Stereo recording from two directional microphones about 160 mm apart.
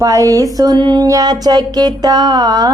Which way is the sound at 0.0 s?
20° right (ahead or behind).